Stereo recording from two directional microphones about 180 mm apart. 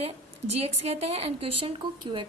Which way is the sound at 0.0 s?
35° right (ahead or behind).